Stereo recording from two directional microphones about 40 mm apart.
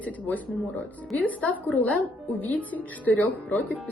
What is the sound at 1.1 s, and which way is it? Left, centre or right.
Speech, left.